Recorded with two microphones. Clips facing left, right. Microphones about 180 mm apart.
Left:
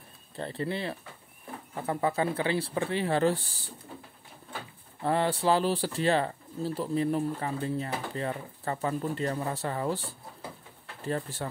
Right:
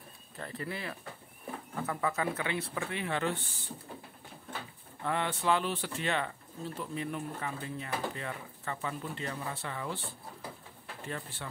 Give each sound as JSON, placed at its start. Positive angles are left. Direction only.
{"t": 0.4, "sound": "speech", "side_deg": 30}
{"t": 5.0, "sound": "speech", "side_deg": 35}